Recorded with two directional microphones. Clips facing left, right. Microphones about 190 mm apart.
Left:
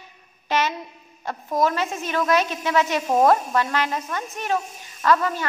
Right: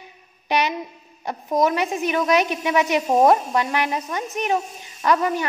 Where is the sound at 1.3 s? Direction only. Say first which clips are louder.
Right 2 dB; 15° right (ahead or behind).